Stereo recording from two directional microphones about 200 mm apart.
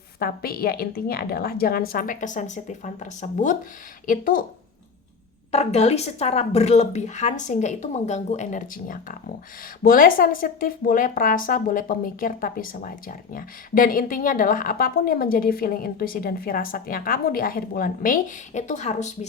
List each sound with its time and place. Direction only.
0.2 s speech: 50° left (ahead or behind)
5.5 s a woman's voice: 30° left (ahead or behind)